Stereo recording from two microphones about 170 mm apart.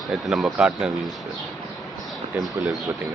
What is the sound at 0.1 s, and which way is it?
Speech, centre (ahead or behind).